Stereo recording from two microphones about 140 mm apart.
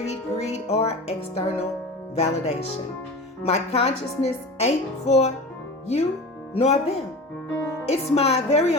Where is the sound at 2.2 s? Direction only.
50° left (ahead or behind).